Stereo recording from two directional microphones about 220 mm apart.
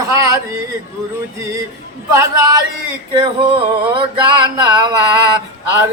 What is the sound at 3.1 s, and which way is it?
Male singing, 20° right (ahead or behind).